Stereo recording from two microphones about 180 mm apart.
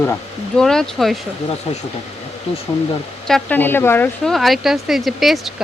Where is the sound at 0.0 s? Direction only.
5° left (ahead or behind).